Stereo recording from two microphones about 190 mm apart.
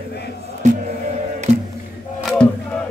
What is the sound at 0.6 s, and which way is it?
Music, 40° right (ahead or behind).